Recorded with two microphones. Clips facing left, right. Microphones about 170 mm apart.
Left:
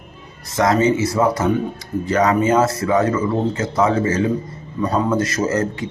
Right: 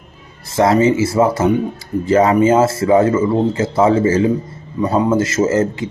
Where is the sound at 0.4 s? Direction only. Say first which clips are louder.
Right 3 dB; 30° right (ahead or behind).